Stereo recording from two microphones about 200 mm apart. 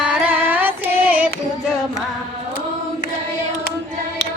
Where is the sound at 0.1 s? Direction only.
10° right (ahead or behind).